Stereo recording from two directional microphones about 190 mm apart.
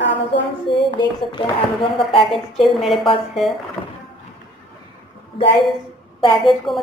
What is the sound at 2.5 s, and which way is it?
Speech, centre (ahead or behind).